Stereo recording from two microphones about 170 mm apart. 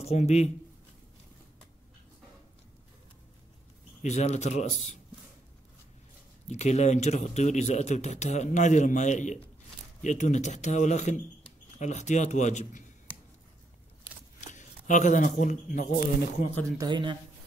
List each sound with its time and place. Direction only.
0.0 s speech: 40° left (ahead or behind)
4.0 s speech: 40° left (ahead or behind)
6.4 s speech: 40° left (ahead or behind)
14.4 s speech: 45° left (ahead or behind)
16.7 s speech: 25° right (ahead or behind)